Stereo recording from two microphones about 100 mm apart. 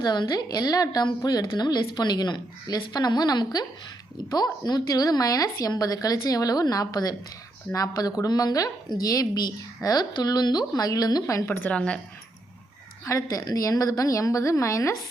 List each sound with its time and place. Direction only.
0.0 s a woman's voice: 45° left (ahead or behind)
11.4 s a woman's voice: 20° left (ahead or behind)
13.1 s speech: 35° left (ahead or behind)